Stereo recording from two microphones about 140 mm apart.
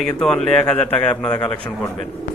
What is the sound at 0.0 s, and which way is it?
Speech, 5° left (ahead or behind).